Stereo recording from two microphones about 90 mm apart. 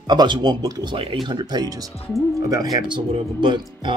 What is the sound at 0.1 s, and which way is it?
Speech, 55° right (ahead or behind).